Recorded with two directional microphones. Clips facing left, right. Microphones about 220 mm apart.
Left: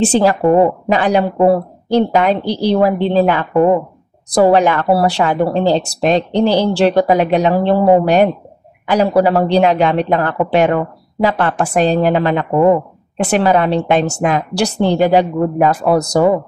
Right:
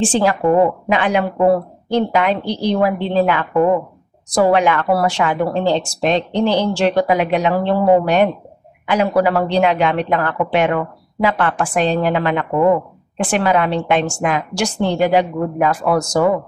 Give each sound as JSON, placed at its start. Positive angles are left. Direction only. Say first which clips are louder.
{"t": 0.0, "sound": "a woman's voice", "louder": "left 4 dB", "side_deg": 40}
{"t": 0.5, "sound": "a woman's voice", "louder": "left 1 dB", "side_deg": 25}